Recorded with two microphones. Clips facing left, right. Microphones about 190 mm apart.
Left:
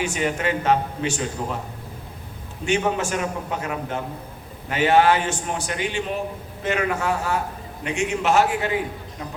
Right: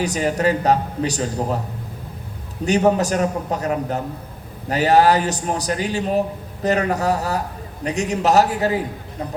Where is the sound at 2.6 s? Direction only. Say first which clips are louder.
Right 6 dB; 40° right (ahead or behind).